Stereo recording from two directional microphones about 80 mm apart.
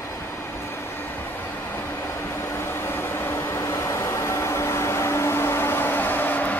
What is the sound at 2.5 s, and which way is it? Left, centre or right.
Vehicle, left.